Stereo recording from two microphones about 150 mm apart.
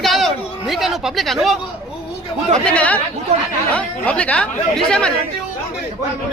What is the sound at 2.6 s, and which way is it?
Speech, 10° left (ahead or behind).